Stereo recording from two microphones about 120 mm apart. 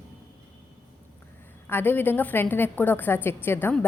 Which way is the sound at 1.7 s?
15° left (ahead or behind).